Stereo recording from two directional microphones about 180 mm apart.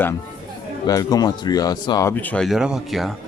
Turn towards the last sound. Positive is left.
turn(degrees=0)  # may be behind; listen again after turning